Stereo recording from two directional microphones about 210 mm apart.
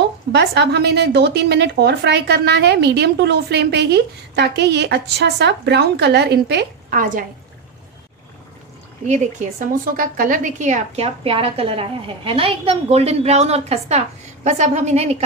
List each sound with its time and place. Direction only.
0.3 s a woman's voice: 55° right (ahead or behind)
9.0 s a woman's voice: 35° right (ahead or behind)